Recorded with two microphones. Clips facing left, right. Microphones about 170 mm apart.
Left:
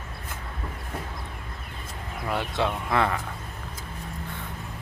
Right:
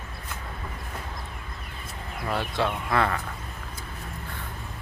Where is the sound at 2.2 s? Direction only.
20° left (ahead or behind).